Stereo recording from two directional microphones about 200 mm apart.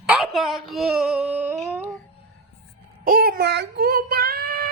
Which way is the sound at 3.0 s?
45° right (ahead or behind).